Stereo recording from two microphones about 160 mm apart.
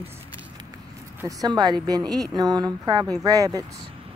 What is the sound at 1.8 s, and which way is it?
Speech, 25° right (ahead or behind).